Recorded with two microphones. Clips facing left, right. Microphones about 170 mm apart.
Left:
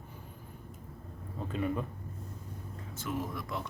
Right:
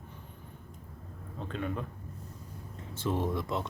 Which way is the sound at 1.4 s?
5° left (ahead or behind).